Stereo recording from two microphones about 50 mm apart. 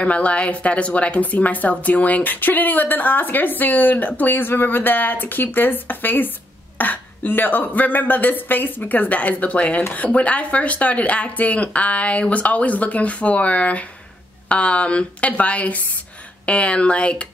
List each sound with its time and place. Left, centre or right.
0.0 s speech: left